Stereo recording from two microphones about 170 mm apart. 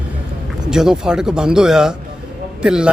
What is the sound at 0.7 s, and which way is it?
Speech, 5° right (ahead or behind).